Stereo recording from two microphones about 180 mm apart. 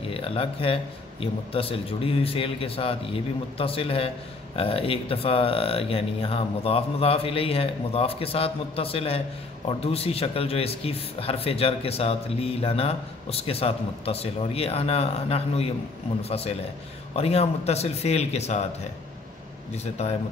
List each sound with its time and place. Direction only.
0.1 s speech: 30° left (ahead or behind)
19.7 s speech: 35° left (ahead or behind)